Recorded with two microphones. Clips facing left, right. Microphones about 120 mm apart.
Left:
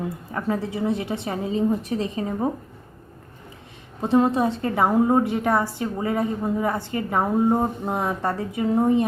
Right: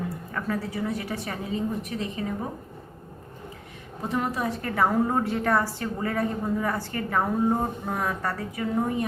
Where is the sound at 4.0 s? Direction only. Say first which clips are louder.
Left 9 dB; 30° left (ahead or behind).